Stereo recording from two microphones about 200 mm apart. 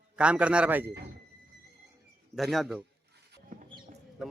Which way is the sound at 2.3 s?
Centre (ahead or behind).